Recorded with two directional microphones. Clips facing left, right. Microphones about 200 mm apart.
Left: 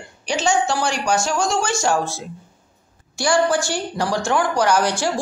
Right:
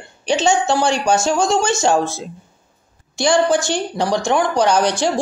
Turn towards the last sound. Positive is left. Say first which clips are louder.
# right 3 dB
turn(degrees=-20)  # may be behind; listen again after turning